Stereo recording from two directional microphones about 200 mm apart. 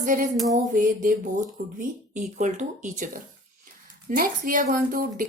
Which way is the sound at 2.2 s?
40° right (ahead or behind).